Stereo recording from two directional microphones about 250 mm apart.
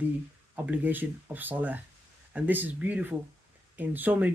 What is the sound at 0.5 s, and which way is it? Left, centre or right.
Speech, centre.